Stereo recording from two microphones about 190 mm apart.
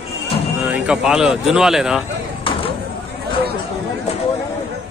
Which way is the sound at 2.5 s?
30° left (ahead or behind).